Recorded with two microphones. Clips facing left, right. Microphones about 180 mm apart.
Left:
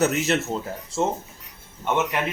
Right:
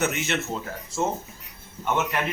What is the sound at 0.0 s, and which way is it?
Speech, 40° left (ahead or behind).